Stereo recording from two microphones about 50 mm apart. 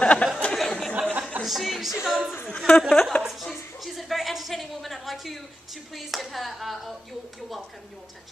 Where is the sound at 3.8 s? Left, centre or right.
Centre.